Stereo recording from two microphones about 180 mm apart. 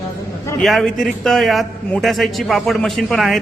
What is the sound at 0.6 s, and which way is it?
A man's voice, centre (ahead or behind).